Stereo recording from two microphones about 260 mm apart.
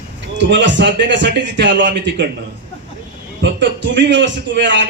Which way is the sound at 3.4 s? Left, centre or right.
Right.